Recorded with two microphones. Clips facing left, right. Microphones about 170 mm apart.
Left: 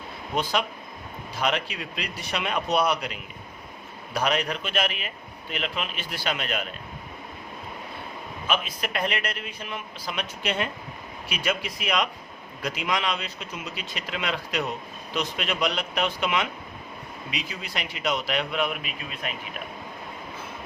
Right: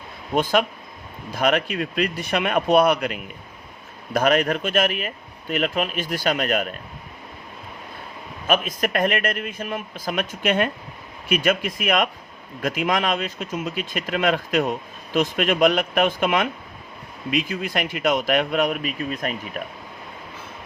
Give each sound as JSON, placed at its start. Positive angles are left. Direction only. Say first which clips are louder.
{"t": 1.3, "sound": "speech", "louder": "right 6 dB", "side_deg": -50}
{"t": 8.4, "sound": "speech", "louder": "right 7 dB", "side_deg": -50}